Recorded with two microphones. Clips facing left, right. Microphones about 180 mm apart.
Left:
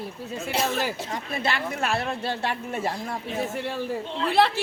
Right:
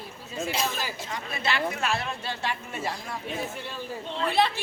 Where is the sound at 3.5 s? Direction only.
75° left (ahead or behind).